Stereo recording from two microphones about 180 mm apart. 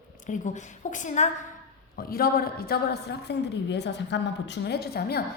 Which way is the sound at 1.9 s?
55° left (ahead or behind).